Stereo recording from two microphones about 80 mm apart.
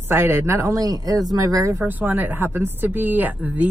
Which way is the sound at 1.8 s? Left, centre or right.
Right.